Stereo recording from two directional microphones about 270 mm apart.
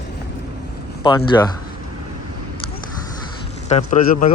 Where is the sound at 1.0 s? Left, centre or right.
Centre.